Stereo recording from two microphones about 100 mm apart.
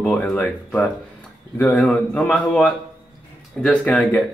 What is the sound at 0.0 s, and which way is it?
Speech, 10° left (ahead or behind).